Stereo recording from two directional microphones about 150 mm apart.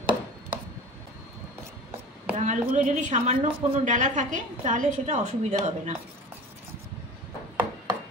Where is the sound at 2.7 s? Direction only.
55° right (ahead or behind).